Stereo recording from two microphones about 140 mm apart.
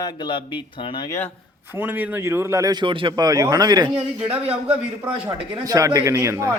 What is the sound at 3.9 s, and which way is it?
A man's voice, 45° right (ahead or behind).